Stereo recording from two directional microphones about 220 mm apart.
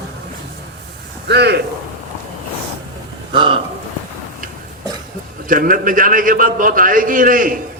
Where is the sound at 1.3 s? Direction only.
50° right (ahead or behind).